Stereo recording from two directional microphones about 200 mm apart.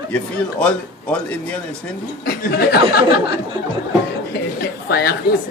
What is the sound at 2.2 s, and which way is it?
Speech, 50° left (ahead or behind).